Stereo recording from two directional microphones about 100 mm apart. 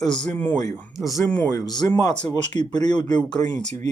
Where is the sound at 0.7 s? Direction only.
5° right (ahead or behind).